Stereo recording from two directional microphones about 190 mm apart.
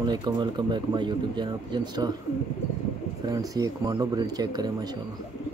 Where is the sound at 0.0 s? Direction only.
25° right (ahead or behind).